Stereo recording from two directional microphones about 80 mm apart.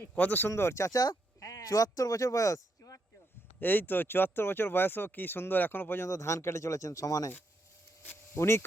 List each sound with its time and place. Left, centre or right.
0.1 s speech: centre
0.9 s speech: left
3.6 s speech: left
6.1 s speech: left
8.0 s speech: left